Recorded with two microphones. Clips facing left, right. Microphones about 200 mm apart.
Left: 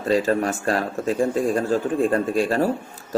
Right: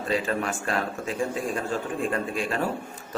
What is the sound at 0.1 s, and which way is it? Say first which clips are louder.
A man's voice: left 7 dB; 40° left (ahead or behind).